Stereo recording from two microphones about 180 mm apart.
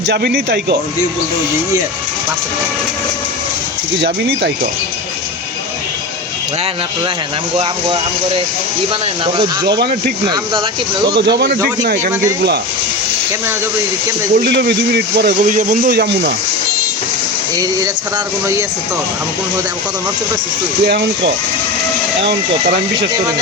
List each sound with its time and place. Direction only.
0.1 s a man's voice: 70° right (ahead or behind)
3.9 s a man's voice: 70° right (ahead or behind)
7.5 s speech: 30° right (ahead or behind)
11.1 s speech: 70° right (ahead or behind)
14.4 s speech: 65° right (ahead or behind)
15.4 s speech: 45° right (ahead or behind); by 16.3 s 65° right (ahead or behind)
17.6 s speech: 20° right (ahead or behind)